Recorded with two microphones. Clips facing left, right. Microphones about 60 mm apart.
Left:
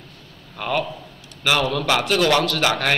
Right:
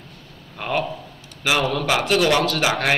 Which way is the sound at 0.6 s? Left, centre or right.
Centre.